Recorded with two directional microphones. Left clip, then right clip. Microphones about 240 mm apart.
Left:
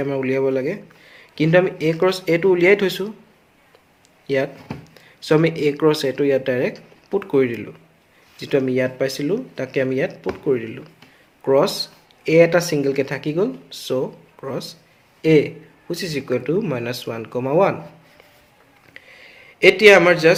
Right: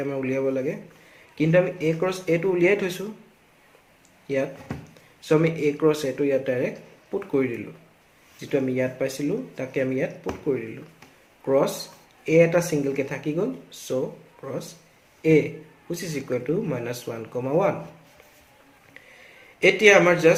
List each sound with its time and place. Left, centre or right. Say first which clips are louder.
0.0 s a man's voice: left 5 dB; left
4.3 s a man's voice: left 5 dB; left
19.0 s a sound: left 5 dB; left
19.5 s a man's voice: left 5 dB; left